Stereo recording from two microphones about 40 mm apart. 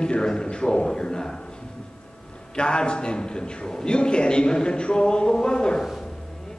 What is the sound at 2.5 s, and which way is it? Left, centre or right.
A man's voice, left.